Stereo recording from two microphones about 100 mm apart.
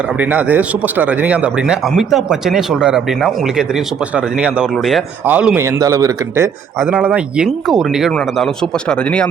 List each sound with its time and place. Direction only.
0.2 s speech: 15° right (ahead or behind)
5.8 s speech: 30° right (ahead or behind)
6.9 s speech: 15° right (ahead or behind)
8.9 s speech: 10° left (ahead or behind)